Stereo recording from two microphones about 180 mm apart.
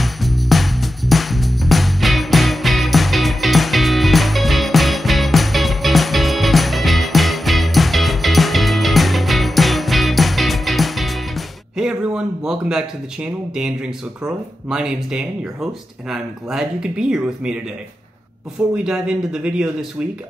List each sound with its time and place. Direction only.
0.0 s music: centre (ahead or behind)
18.9 s speech: 5° right (ahead or behind)